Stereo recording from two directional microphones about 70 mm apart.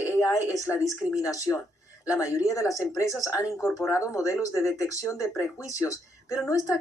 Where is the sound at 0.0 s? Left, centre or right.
Left.